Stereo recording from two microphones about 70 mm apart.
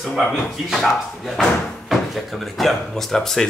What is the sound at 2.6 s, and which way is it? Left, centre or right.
Speech, centre.